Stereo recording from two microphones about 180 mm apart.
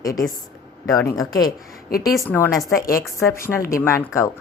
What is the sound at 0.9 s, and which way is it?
Speech, 15° left (ahead or behind).